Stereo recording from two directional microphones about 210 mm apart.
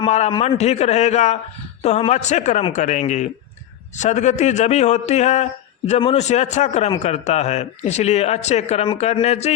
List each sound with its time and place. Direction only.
0.0 s a man's voice: 30° left (ahead or behind)